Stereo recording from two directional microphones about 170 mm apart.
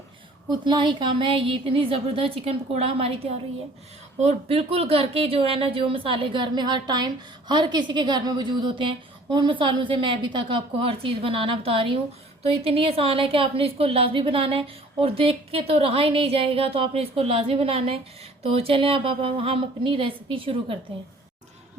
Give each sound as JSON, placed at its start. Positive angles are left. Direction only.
{"t": 0.6, "sound": "speech", "side_deg": -30}